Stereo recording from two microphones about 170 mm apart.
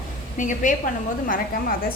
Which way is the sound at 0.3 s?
50° left (ahead or behind).